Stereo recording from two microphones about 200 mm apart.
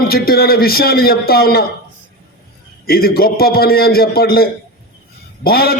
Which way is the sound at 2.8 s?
50° left (ahead or behind).